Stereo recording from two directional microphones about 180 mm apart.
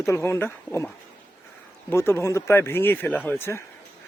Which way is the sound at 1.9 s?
15° left (ahead or behind).